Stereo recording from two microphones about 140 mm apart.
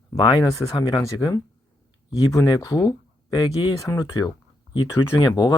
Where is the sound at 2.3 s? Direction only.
25° left (ahead or behind).